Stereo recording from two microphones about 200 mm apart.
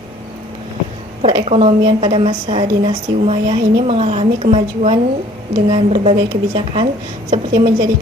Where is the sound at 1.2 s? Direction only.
30° right (ahead or behind).